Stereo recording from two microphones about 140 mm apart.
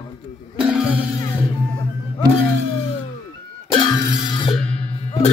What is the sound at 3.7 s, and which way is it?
Music, 35° left (ahead or behind).